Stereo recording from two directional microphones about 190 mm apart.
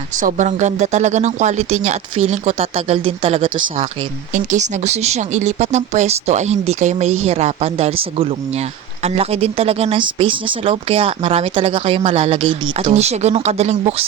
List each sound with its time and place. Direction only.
0.2 s speech: 40° right (ahead or behind)